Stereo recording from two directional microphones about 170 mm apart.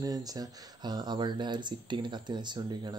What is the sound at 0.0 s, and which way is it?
Speech, 20° right (ahead or behind).